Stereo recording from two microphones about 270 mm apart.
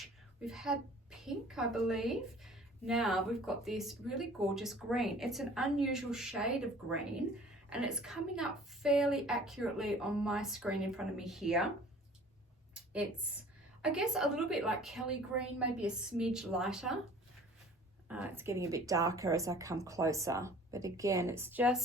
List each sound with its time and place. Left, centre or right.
0.0 s a child's voice: centre
13.8 s a child's voice: centre
18.1 s speech: centre